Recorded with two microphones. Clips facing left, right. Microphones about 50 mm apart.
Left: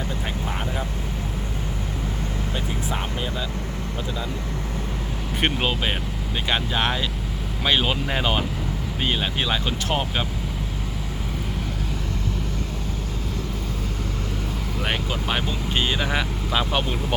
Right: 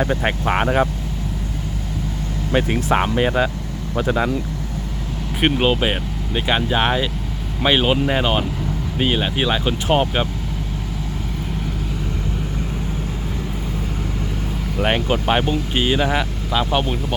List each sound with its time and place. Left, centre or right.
0.0 s speech: right
2.5 s speech: right
5.4 s speech: centre
14.8 s speech: right
15.7 s speech: centre
16.5 s speech: centre